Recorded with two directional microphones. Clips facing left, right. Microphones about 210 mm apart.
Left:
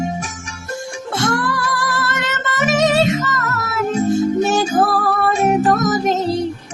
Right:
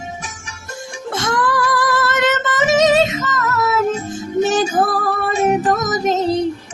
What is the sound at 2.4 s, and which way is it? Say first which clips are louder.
Music: even; 20° right (ahead or behind).